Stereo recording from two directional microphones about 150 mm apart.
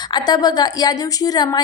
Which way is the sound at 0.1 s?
25° left (ahead or behind).